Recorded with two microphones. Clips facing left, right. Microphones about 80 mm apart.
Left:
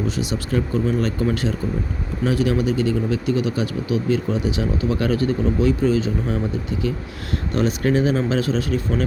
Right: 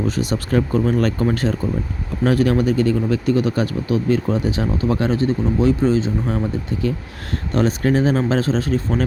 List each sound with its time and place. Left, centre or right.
0.2 s speech: right
7.5 s speech: right